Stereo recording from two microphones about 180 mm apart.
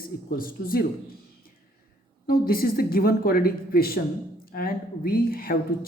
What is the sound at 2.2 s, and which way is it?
A woman's voice, 55° left (ahead or behind).